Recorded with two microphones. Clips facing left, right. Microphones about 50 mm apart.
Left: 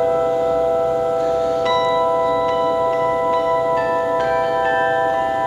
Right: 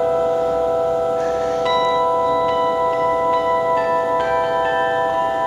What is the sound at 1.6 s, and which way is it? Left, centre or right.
Tubular bells, centre.